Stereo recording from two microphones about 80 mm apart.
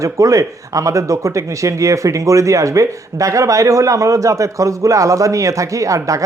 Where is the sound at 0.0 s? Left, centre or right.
Right.